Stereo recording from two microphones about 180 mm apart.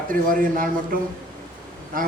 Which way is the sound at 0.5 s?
50° right (ahead or behind).